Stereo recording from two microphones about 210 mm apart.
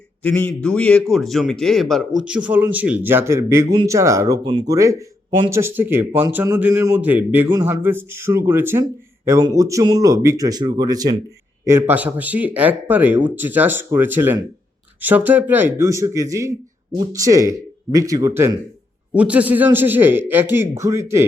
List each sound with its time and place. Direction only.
0.2 s a man's voice: 10° left (ahead or behind); by 21.2 s 15° right (ahead or behind)